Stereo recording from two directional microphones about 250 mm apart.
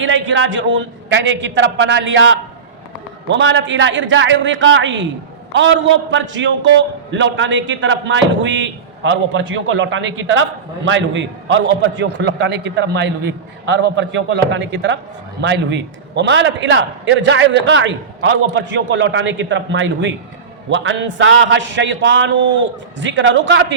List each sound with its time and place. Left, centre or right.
0.0 s a man's voice: right